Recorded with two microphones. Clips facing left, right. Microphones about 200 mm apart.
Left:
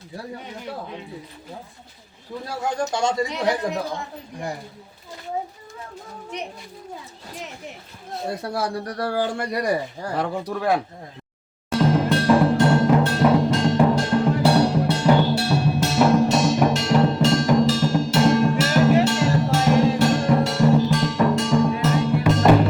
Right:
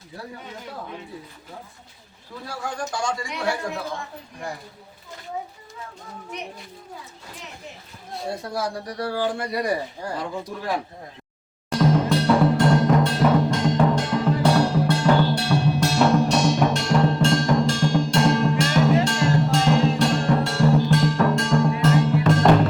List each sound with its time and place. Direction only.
2.6 s a man's voice: 25° left (ahead or behind)
8.4 s speech: 60° left (ahead or behind)
10.2 s speech: 65° left (ahead or behind)
11.7 s music: 5° left (ahead or behind)